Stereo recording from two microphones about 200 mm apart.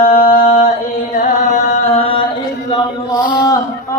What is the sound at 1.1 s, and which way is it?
Chant, 40° left (ahead or behind).